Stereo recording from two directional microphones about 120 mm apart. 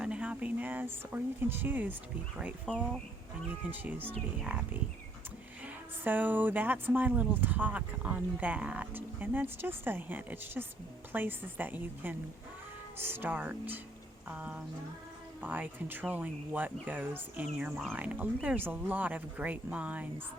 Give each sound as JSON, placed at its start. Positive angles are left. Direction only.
{"t": 0.0, "sound": "speech", "side_deg": -10}
{"t": 2.6, "sound": "speech", "side_deg": 5}
{"t": 3.7, "sound": "speech", "side_deg": -15}